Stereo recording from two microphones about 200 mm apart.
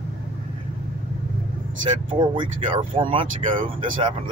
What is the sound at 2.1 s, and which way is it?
Speech, 25° right (ahead or behind).